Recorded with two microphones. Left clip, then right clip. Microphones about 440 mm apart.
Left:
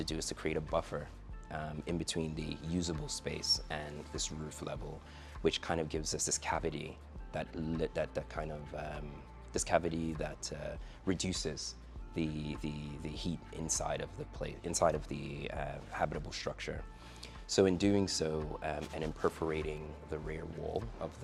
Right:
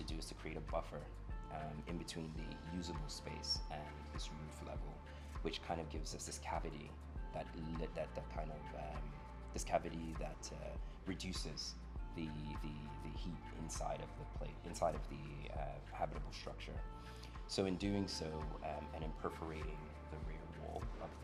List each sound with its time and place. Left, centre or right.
0.0 s speech: left